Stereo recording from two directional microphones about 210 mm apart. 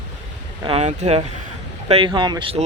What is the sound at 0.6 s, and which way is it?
Speech, 30° right (ahead or behind).